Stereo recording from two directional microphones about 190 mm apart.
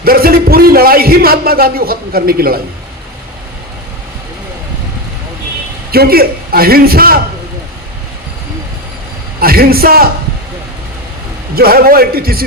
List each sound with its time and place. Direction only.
0.0 s a man's voice: 50° right (ahead or behind)
5.9 s a man's voice: 55° right (ahead or behind)
9.4 s a man's voice: 50° right (ahead or behind)
11.5 s a man's voice: 50° right (ahead or behind)